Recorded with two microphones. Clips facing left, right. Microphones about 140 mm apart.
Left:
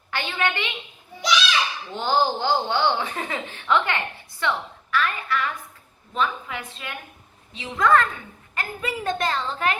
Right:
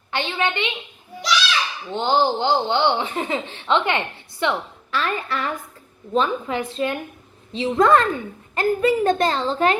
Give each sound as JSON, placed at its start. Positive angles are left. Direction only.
{"t": 0.1, "sound": "speech", "side_deg": -25}
{"t": 1.9, "sound": "a woman's voice", "side_deg": -20}